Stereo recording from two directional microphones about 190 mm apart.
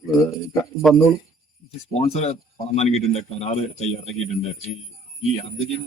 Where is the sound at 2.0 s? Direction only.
35° left (ahead or behind).